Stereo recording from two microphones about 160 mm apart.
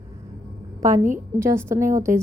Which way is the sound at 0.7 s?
20° right (ahead or behind).